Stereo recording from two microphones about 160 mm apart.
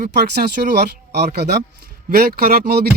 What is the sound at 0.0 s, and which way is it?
Speech, 90° right.